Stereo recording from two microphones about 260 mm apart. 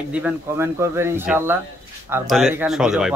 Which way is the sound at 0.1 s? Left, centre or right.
Centre.